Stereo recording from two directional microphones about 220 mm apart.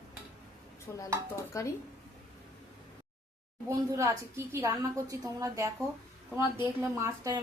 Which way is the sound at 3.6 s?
15° right (ahead or behind).